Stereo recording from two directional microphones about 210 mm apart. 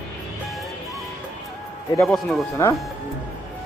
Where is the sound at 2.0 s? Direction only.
5° left (ahead or behind).